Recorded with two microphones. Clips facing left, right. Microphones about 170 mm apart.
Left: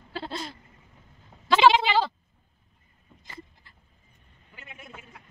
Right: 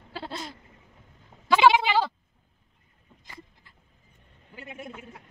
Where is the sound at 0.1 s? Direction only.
10° right (ahead or behind).